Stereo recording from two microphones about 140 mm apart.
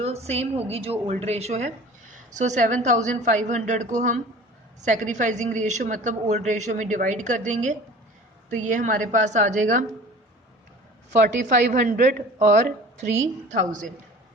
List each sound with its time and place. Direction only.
0.0 s a woman's voice: 50° right (ahead or behind); by 9.8 s 65° right (ahead or behind)
11.1 s a woman's voice: 60° right (ahead or behind)